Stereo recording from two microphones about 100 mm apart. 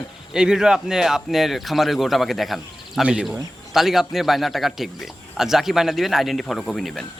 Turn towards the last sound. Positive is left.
turn(degrees=5)  # may be behind; listen again after turning